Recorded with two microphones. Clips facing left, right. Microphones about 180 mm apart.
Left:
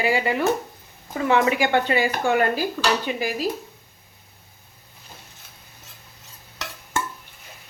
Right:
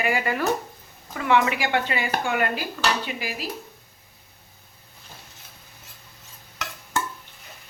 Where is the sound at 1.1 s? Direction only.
35° left (ahead or behind).